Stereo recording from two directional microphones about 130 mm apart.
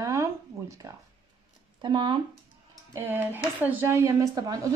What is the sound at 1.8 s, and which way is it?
Speech, 35° right (ahead or behind).